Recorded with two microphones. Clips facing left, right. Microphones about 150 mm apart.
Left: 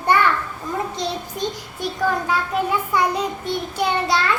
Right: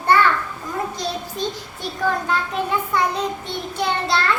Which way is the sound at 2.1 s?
10° left (ahead or behind).